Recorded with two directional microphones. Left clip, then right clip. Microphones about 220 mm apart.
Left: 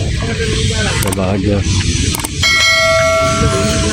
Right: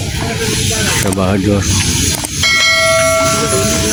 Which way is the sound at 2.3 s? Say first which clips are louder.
Even; centre (ahead or behind).